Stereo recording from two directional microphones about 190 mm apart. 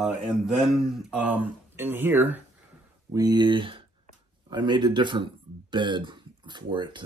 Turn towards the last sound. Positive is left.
turn(degrees=-25)  # may be behind; listen again after turning